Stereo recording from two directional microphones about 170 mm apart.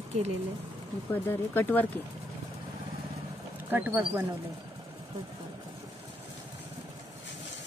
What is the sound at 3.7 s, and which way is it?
Speech, 10° right (ahead or behind).